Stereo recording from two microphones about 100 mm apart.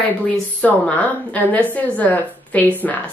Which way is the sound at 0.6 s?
15° left (ahead or behind).